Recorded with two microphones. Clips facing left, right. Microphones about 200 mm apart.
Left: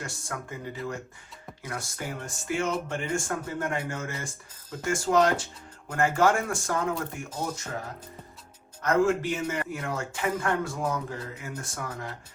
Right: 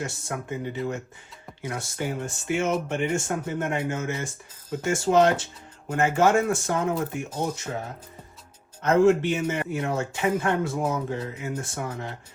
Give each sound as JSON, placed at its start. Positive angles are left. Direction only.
{"t": 0.0, "sound": "a man's voice", "side_deg": -25}
{"t": 8.8, "sound": "a man's voice", "side_deg": -25}